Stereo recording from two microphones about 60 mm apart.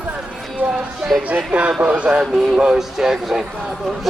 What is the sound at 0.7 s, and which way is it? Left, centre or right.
Speech, centre.